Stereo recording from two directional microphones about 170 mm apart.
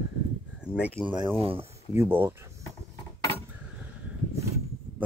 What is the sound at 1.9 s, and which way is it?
Speech, 15° right (ahead or behind).